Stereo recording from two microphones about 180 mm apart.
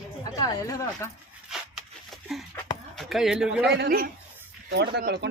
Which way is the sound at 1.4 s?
Centre (ahead or behind).